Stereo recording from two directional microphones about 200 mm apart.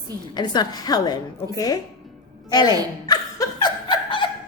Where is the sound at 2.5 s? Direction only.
20° left (ahead or behind).